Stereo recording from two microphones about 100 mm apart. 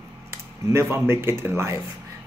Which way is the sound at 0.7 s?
25° right (ahead or behind).